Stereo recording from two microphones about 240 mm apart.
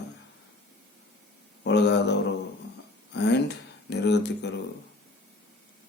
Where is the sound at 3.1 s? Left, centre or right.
Left.